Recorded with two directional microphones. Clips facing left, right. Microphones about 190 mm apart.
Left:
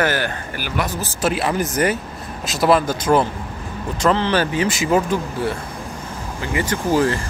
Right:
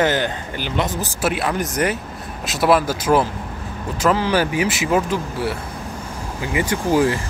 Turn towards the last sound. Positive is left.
turn(degrees=-15)  # may be behind; listen again after turning